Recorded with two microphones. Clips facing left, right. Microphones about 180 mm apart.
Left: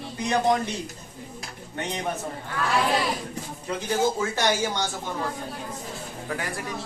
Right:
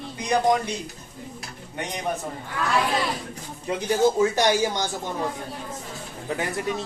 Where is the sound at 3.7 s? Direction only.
20° right (ahead or behind).